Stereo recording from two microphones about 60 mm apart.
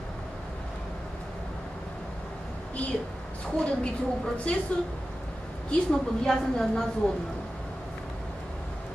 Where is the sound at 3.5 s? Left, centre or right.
Centre.